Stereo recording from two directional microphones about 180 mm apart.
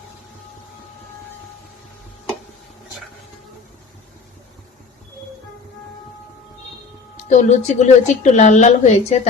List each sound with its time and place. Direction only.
7.3 s a woman's voice: 40° left (ahead or behind)